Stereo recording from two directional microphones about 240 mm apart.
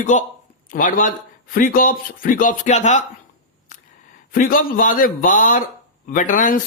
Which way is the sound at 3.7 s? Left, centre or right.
Left.